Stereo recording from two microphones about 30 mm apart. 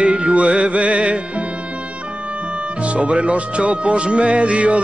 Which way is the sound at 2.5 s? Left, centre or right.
Right.